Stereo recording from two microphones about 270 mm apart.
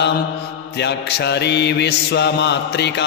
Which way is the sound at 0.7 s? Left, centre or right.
Left.